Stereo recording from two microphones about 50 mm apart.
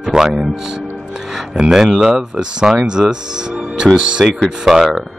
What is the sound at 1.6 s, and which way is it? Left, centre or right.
A man's voice, centre.